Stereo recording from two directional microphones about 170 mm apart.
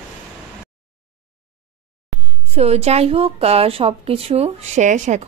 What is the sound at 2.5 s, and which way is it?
A woman's voice, 40° right (ahead or behind).